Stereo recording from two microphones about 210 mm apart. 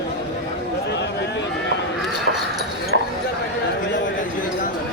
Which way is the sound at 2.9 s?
55° right (ahead or behind).